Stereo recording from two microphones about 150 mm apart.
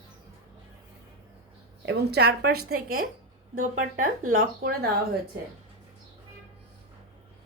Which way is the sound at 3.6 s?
70° right (ahead or behind).